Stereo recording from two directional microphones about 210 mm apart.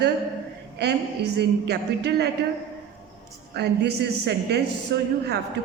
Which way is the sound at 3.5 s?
55° right (ahead or behind).